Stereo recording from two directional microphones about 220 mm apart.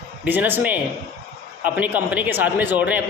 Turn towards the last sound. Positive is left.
turn(degrees=-5)  # may be behind; listen again after turning